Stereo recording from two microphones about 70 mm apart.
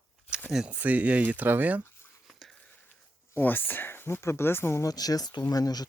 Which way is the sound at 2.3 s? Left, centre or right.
Centre.